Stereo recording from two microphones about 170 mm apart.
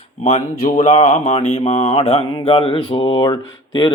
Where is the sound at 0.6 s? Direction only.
45° left (ahead or behind).